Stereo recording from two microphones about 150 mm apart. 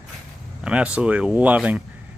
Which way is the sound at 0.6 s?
10° right (ahead or behind).